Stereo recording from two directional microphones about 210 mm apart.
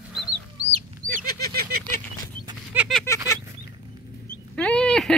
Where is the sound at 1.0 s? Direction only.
40° right (ahead or behind).